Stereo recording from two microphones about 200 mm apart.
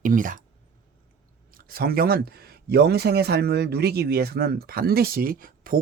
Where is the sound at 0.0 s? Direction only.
40° right (ahead or behind).